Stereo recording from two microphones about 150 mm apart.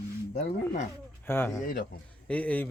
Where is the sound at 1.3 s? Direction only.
15° left (ahead or behind).